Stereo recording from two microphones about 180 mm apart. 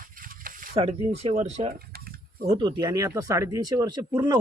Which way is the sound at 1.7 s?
60° right (ahead or behind).